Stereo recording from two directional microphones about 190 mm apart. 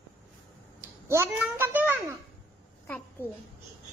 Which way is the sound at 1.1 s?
15° right (ahead or behind).